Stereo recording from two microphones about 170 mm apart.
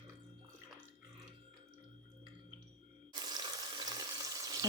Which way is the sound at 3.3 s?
25° right (ahead or behind).